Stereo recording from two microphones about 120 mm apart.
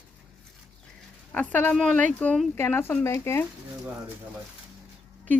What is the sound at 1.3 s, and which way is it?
Speech, 10° left (ahead or behind).